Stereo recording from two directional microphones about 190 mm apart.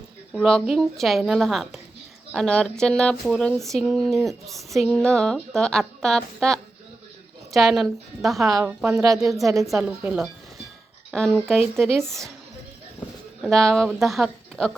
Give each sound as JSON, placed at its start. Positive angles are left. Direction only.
{"t": 0.3, "sound": "speech", "side_deg": 5}
{"t": 8.8, "sound": "a woman's voice", "side_deg": -15}
{"t": 9.8, "sound": "speech", "side_deg": -5}
{"t": 13.4, "sound": "a woman's voice", "side_deg": 5}